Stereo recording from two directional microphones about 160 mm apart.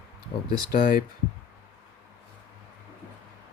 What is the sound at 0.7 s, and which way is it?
Speech, 60° left (ahead or behind).